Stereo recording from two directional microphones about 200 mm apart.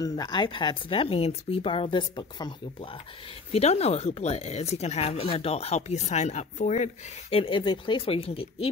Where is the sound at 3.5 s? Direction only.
30° left (ahead or behind).